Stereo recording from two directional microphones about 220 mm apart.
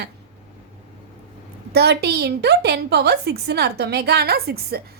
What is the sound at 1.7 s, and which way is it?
A woman's voice, 50° right (ahead or behind).